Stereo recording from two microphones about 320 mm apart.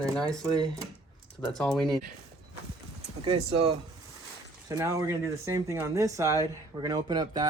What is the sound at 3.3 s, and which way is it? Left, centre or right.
Speech, centre.